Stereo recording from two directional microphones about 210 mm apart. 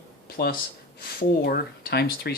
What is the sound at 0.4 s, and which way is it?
Speech, 50° left (ahead or behind).